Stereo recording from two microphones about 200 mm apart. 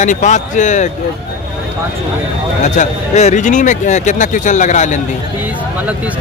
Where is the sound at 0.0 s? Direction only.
40° left (ahead or behind).